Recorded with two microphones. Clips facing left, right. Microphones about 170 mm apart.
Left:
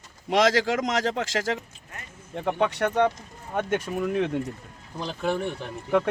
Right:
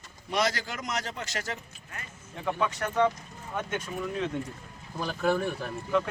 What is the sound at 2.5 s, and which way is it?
Speech, 65° left (ahead or behind).